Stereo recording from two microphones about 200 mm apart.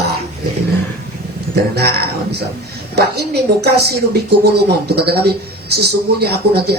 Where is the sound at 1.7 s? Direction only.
55° right (ahead or behind).